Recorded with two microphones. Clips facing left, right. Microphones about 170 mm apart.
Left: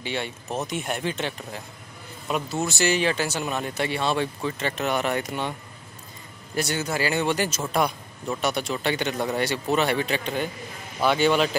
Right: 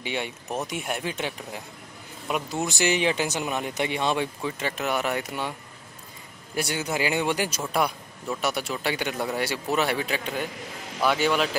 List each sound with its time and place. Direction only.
0.0 s speech: 15° right (ahead or behind)
6.5 s speech: 10° right (ahead or behind)